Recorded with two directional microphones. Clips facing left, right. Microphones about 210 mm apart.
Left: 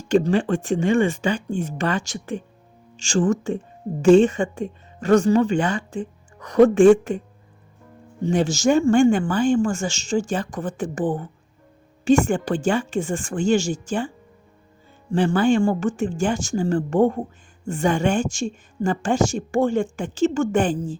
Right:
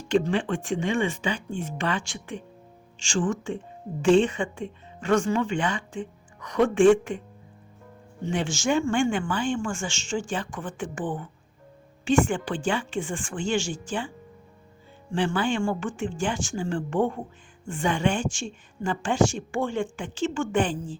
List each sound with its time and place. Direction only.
0.1 s a woman's voice: 40° left (ahead or behind)
8.2 s a woman's voice: 40° left (ahead or behind)
15.1 s a woman's voice: 40° left (ahead or behind)